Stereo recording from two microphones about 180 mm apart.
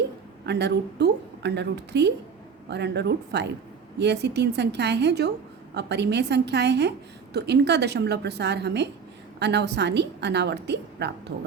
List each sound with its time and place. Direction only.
0.4 s a woman's voice: 70° right (ahead or behind)